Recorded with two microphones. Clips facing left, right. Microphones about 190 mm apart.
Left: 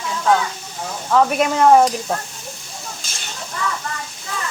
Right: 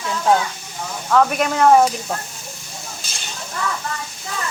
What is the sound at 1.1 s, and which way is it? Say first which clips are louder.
Speech: left 1 dB; 5° left (ahead or behind).